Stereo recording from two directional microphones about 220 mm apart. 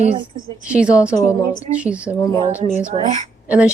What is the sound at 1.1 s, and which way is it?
Speech, 15° left (ahead or behind).